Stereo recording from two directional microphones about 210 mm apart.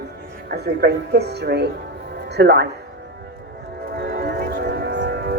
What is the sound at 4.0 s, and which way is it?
Music, 55° right (ahead or behind).